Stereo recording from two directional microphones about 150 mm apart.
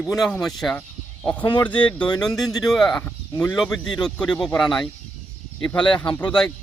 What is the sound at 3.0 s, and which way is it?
Speech, 10° left (ahead or behind).